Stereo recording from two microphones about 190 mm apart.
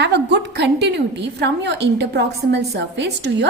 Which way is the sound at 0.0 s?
60° right (ahead or behind).